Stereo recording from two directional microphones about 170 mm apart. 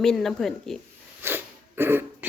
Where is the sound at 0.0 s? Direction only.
Centre (ahead or behind).